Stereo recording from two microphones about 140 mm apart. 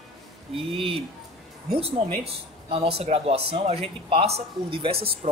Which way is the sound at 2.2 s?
45° right (ahead or behind).